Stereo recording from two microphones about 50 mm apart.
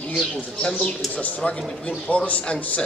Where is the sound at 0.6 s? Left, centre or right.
Left.